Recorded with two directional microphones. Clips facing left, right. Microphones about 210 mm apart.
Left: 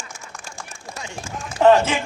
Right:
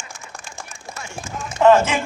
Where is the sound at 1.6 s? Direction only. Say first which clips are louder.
Right 1 dB; 35° left (ahead or behind).